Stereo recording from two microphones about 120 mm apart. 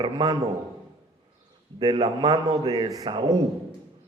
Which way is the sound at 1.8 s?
35° right (ahead or behind).